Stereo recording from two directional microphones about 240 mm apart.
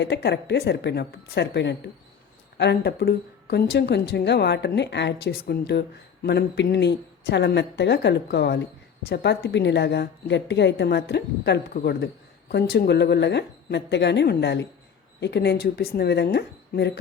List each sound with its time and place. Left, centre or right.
0.0 s speech: left